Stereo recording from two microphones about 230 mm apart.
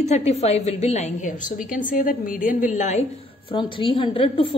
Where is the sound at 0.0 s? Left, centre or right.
Left.